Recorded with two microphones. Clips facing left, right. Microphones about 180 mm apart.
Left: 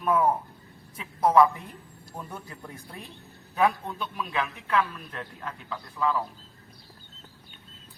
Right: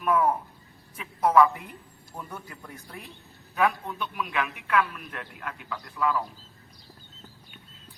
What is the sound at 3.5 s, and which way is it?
A man's voice, 25° left (ahead or behind).